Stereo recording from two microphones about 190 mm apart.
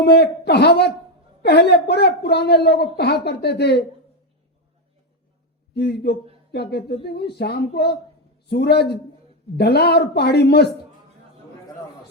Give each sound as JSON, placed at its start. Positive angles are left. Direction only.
{"t": 0.0, "sound": "a woman's voice", "side_deg": 60}
{"t": 5.7, "sound": "a woman's voice", "side_deg": 60}